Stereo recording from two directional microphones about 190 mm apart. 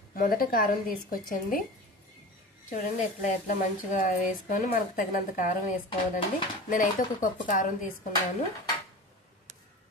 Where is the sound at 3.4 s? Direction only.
40° left (ahead or behind).